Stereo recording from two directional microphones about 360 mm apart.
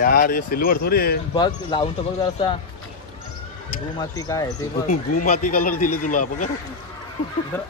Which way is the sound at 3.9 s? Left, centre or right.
Centre.